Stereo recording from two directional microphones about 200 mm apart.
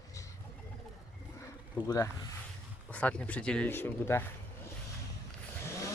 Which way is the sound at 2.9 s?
5° left (ahead or behind).